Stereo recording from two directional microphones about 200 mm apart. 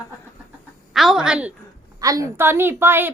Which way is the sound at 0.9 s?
Centre (ahead or behind).